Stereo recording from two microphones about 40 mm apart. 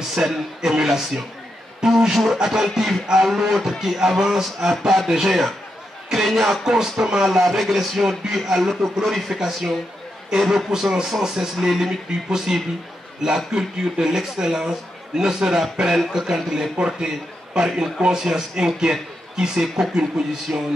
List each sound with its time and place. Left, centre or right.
0.1 s a man's voice: centre
7.4 s a man's voice: centre
15.6 s a man's voice: centre
17.7 s a man's voice: centre
20.5 s music: right